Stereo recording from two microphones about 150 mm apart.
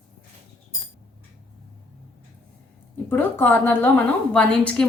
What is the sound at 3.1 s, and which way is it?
A woman's voice, 15° left (ahead or behind).